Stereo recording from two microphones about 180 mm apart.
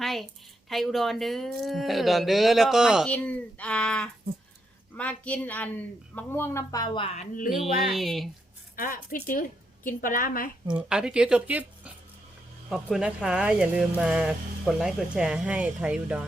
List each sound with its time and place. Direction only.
0.0 s a sound: centre (ahead or behind)
0.7 s speech: centre (ahead or behind)
3.1 s a woman's voice: 5° left (ahead or behind); by 7.1 s 25° left (ahead or behind)
7.2 s speech: 45° left (ahead or behind)
7.5 s speech: centre (ahead or behind)
8.7 s a woman's voice: 50° left (ahead or behind)
10.8 s speech: 5° right (ahead or behind)
12.7 s speech: 5° right (ahead or behind)